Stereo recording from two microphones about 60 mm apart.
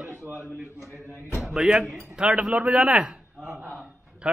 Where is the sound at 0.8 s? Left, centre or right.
Right.